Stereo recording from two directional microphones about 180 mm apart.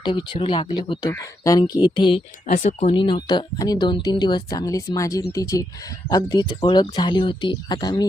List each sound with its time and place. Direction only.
0.0 s speech: 25° left (ahead or behind)
2.9 s speech: 25° left (ahead or behind)